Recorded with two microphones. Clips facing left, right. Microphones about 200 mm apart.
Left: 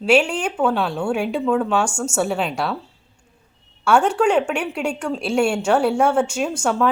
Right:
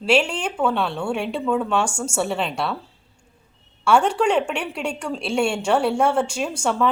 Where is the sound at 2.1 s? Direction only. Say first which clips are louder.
Left 2 dB; 5° left (ahead or behind).